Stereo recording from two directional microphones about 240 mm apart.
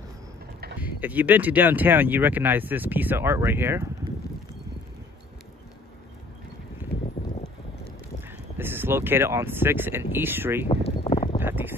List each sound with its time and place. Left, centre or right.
0.7 s speech: centre
8.2 s speech: centre
10.7 s a sound: left
11.3 s boat: centre